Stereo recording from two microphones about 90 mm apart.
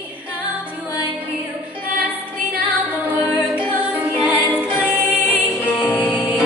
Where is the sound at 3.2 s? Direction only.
20° left (ahead or behind).